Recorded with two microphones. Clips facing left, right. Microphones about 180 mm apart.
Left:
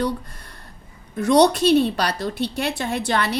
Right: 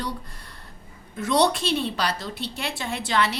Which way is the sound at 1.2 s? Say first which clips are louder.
Left 6 dB; 45° left (ahead or behind).